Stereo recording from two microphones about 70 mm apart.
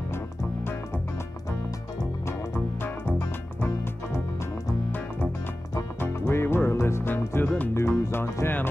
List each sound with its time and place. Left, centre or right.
3.2 s music: left
5.9 s music: left
7.4 s music: left
7.7 s music: left